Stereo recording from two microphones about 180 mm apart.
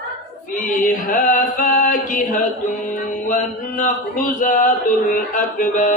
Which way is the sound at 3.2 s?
45° left (ahead or behind).